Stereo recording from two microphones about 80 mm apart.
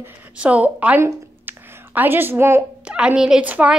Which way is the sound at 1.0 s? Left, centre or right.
Right.